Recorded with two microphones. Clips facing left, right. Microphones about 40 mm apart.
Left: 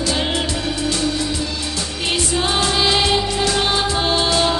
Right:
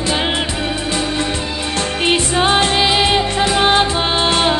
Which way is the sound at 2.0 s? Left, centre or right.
Right.